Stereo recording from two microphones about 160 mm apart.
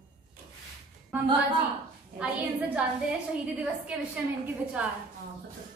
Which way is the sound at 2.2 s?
10° right (ahead or behind).